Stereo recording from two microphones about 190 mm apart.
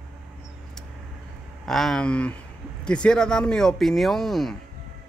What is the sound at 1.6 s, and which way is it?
Speech, centre (ahead or behind).